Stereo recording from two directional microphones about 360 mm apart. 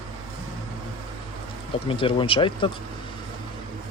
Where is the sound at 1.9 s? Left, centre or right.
Centre.